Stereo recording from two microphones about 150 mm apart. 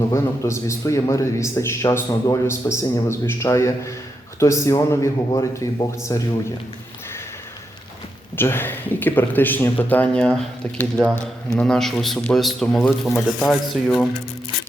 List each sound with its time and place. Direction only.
0.1 s a man's voice: 20° left (ahead or behind)
8.4 s a man's voice: 15° left (ahead or behind)